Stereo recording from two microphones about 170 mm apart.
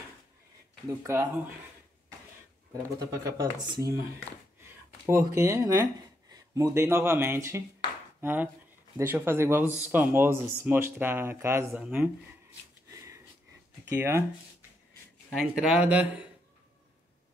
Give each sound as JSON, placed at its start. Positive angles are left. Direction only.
{"t": 0.8, "sound": "speech", "side_deg": -15}
{"t": 3.3, "sound": "speech", "side_deg": -20}
{"t": 5.0, "sound": "speech", "side_deg": -15}
{"t": 12.9, "sound": "sniff", "side_deg": -20}
{"t": 13.8, "sound": "speech", "side_deg": -15}
{"t": 15.3, "sound": "speech", "side_deg": -5}